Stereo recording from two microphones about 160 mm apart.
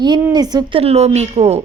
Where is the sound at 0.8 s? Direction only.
40° right (ahead or behind).